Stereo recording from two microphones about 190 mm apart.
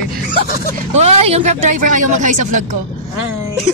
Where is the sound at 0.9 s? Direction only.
35° right (ahead or behind).